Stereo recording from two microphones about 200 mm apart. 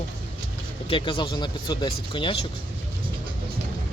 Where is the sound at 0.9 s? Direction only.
25° left (ahead or behind).